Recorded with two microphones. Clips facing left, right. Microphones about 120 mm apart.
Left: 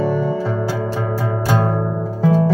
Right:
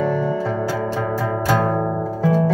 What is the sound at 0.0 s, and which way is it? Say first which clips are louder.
Music: left 1 dB; 35° left (ahead or behind).